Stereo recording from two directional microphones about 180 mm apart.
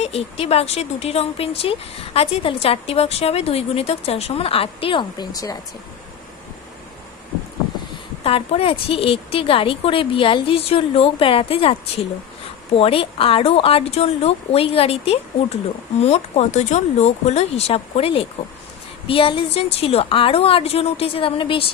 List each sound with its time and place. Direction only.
0.0 s speech: 35° left (ahead or behind); by 5.5 s 20° left (ahead or behind)
8.2 s speech: 35° left (ahead or behind)